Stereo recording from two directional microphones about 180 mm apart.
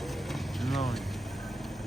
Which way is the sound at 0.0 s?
Centre (ahead or behind).